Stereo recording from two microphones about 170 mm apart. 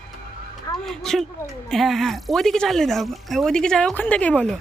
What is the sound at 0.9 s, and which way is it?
Speech, centre (ahead or behind).